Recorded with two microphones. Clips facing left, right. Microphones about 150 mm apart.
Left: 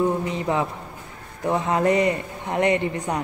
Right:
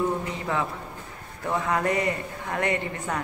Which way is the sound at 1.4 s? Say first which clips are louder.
Left 5 dB; 20° left (ahead or behind).